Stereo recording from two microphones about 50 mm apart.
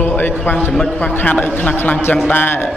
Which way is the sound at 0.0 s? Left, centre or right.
Left.